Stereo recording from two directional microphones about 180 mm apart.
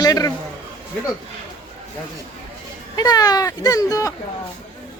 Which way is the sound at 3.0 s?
20° left (ahead or behind).